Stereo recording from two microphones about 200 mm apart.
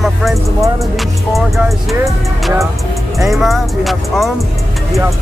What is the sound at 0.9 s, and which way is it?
Speech, centre (ahead or behind).